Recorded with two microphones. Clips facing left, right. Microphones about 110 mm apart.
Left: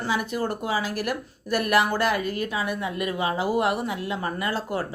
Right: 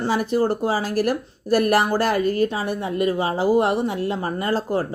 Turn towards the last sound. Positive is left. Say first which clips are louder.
# right 5 dB
turn(degrees=-35)  # may be behind; listen again after turning